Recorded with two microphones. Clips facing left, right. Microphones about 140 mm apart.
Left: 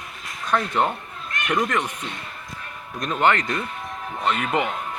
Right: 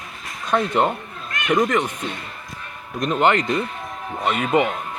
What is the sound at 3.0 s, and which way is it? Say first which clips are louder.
Speech: right 3 dB; 10° right (ahead or behind).